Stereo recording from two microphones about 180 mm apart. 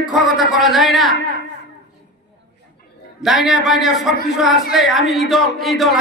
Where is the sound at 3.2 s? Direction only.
Centre (ahead or behind).